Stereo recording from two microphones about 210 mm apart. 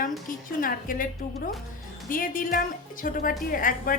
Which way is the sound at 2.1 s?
40° left (ahead or behind).